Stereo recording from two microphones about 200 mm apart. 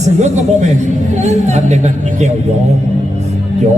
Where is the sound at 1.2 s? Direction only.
35° right (ahead or behind).